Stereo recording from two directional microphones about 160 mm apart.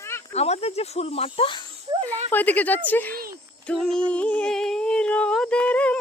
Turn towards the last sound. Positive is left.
turn(degrees=10)  # may be behind; listen again after turning